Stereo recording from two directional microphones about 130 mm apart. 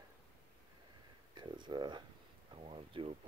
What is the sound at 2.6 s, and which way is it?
Speech, 45° right (ahead or behind).